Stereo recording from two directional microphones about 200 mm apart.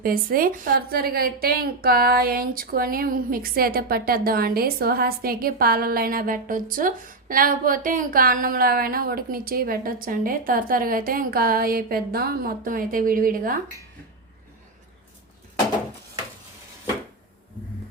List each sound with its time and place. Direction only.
0.0 s a woman's voice: 45° right (ahead or behind)